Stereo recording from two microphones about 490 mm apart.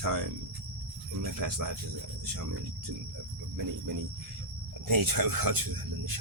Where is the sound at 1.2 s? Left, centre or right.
Right.